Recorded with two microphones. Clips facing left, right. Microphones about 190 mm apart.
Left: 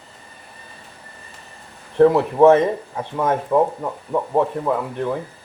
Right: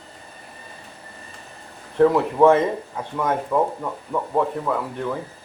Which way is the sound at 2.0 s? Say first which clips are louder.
Left 3 dB; 20° left (ahead or behind).